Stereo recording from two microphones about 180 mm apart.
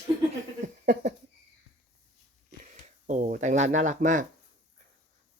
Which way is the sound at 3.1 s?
45° right (ahead or behind).